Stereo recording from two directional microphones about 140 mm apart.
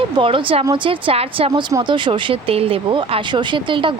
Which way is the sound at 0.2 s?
40° right (ahead or behind).